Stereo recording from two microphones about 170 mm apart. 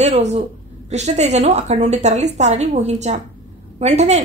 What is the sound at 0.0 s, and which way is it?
A woman's voice, 40° right (ahead or behind).